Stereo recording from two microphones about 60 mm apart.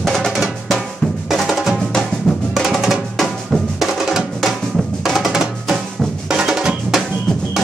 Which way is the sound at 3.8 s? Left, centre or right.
Centre.